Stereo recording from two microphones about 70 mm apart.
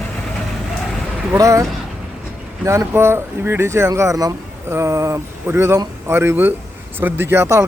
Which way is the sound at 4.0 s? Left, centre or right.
Right.